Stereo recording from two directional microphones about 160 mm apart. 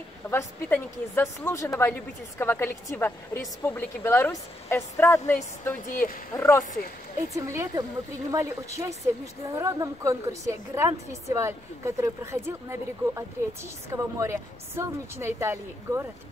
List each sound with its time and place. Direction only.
0.3 s a woman's voice: 15° left (ahead or behind)
5.9 s speech: 60° left (ahead or behind)
6.3 s a woman's voice: 15° left (ahead or behind)
7.3 s a woman's voice: 20° right (ahead or behind)